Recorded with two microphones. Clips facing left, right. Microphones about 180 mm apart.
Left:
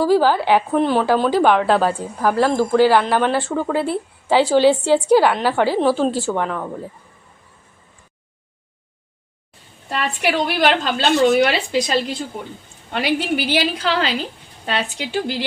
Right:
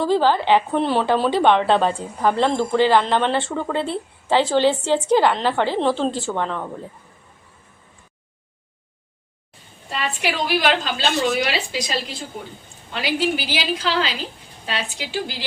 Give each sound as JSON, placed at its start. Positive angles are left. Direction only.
{"t": 0.0, "sound": "a woman's voice", "side_deg": 10}
{"t": 9.9, "sound": "a woman's voice", "side_deg": 55}